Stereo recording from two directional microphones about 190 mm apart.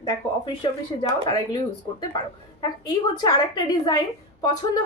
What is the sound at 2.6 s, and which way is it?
A woman's voice, 20° left (ahead or behind).